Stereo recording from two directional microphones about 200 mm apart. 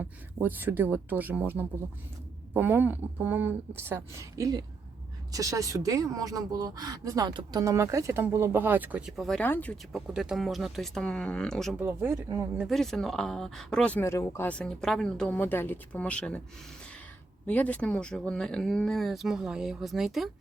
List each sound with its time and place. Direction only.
0.0 s speech: 10° right (ahead or behind); by 10.0 s 10° left (ahead or behind)
10.1 s speech: 5° right (ahead or behind)
11.8 s speech: 10° right (ahead or behind)
12.6 s speech: centre (ahead or behind)
17.4 s speech: 5° left (ahead or behind)